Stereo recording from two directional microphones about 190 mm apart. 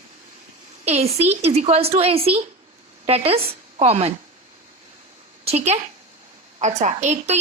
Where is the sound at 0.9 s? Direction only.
35° right (ahead or behind).